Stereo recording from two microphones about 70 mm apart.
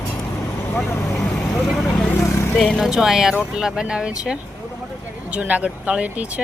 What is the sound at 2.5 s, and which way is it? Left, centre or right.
Speech, centre.